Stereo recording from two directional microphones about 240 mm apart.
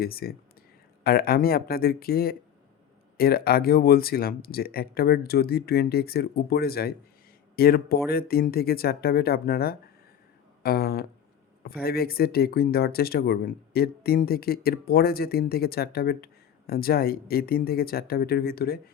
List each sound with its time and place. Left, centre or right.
0.0 s speech: left
10.6 s a sound: left
11.6 s speech: left